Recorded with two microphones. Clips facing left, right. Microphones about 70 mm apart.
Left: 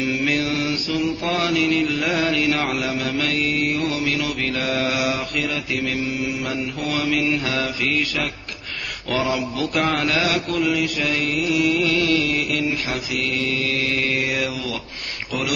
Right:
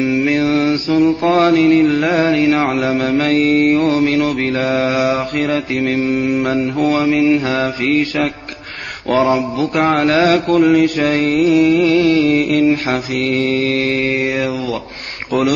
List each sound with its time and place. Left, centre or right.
0.0 s mantra: right